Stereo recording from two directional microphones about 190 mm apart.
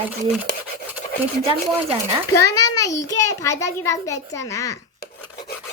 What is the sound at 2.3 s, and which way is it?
A child's voice, 20° left (ahead or behind).